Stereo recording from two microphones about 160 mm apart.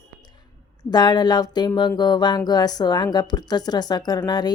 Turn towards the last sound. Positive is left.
turn(degrees=25)  # may be behind; listen again after turning